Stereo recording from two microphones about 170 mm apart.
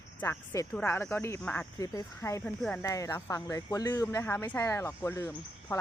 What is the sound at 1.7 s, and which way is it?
Speech, 20° left (ahead or behind).